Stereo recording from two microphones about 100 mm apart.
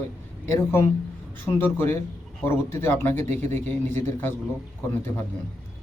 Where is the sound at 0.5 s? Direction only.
30° left (ahead or behind).